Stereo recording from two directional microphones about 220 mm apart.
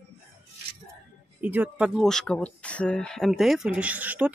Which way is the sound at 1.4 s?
5° right (ahead or behind).